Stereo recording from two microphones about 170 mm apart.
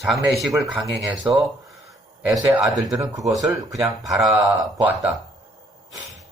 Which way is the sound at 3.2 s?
20° right (ahead or behind).